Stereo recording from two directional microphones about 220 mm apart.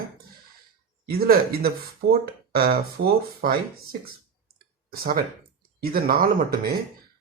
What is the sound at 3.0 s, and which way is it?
Speech, 55° right (ahead or behind).